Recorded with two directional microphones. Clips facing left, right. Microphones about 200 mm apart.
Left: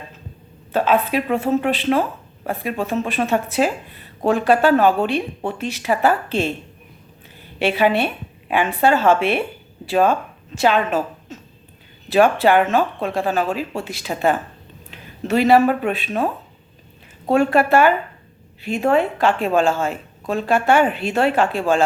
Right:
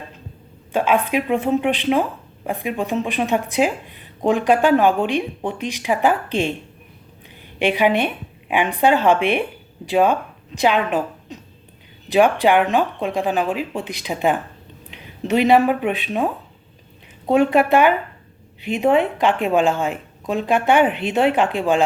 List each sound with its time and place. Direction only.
0.7 s speech: 15° right (ahead or behind)
7.6 s a woman's voice: 15° right (ahead or behind)